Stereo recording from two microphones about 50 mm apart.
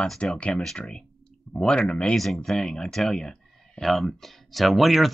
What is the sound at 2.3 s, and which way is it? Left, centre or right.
Speech, centre.